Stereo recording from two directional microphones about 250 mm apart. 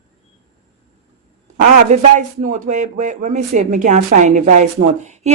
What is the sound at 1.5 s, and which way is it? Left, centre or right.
A man's voice, right.